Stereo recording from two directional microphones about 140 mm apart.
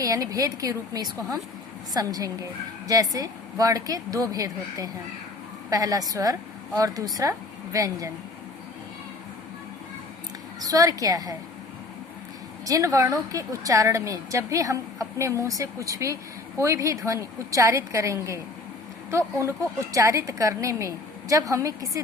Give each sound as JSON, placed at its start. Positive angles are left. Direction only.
{"t": 0.0, "sound": "a woman's voice", "side_deg": -25}
{"t": 10.6, "sound": "a woman's voice", "side_deg": -25}
{"t": 12.6, "sound": "a woman's voice", "side_deg": -25}